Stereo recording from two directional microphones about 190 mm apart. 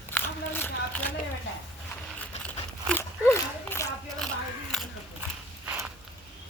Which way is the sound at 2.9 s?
10° left (ahead or behind).